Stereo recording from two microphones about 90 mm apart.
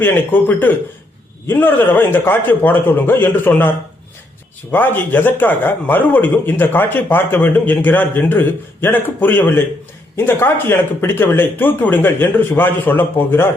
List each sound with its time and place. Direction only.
0.0 s a man's voice: 20° left (ahead or behind)